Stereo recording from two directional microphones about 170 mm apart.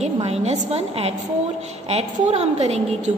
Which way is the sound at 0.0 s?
40° right (ahead or behind).